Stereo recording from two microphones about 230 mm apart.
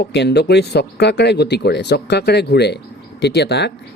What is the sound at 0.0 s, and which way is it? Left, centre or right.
Speech, left.